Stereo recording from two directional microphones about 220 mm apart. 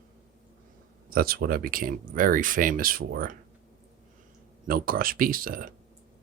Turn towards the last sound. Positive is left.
turn(degrees=-40)  # may be behind; listen again after turning